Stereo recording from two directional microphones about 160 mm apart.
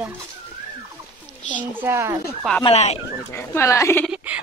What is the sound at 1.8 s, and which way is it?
Speech, 15° right (ahead or behind).